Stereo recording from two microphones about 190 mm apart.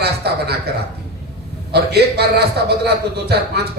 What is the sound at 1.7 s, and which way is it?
A man's voice, 60° right (ahead or behind).